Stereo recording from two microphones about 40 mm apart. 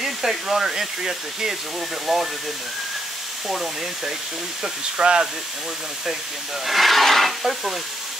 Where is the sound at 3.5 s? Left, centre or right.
Centre.